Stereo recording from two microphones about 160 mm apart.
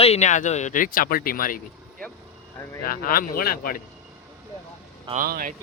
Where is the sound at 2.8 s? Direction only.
65° left (ahead or behind).